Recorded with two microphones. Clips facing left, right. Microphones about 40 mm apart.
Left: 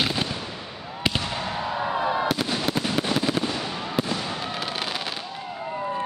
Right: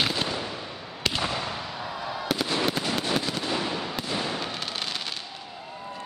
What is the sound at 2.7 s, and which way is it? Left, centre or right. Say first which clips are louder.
Fireworks: left 2 dB; centre.